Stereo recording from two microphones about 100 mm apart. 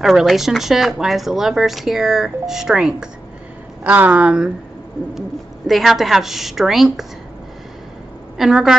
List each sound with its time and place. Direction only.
0.0 s speech: centre (ahead or behind)
3.8 s speech: 15° right (ahead or behind)
5.7 s speech: centre (ahead or behind)
8.4 s speech: 5° right (ahead or behind)